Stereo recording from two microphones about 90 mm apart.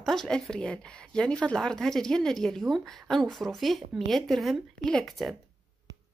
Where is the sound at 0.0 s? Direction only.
5° left (ahead or behind).